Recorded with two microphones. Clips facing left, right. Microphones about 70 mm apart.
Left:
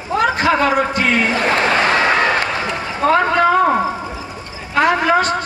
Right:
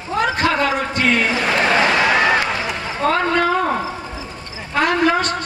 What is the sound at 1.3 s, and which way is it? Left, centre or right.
Speech, left.